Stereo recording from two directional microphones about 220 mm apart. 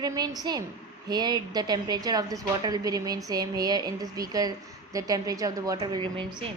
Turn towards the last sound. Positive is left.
turn(degrees=-20)  # may be behind; listen again after turning